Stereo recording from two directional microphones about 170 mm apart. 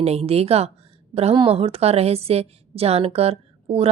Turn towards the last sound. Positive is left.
turn(degrees=-35)  # may be behind; listen again after turning